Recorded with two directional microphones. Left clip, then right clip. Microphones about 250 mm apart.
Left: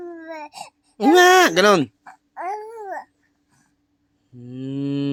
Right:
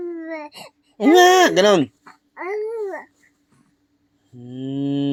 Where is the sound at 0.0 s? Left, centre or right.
Centre.